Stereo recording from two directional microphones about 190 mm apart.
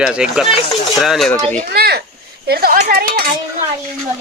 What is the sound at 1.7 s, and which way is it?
Speech, 55° right (ahead or behind).